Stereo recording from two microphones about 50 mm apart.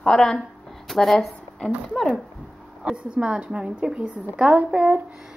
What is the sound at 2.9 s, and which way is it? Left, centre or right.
A woman's voice, right.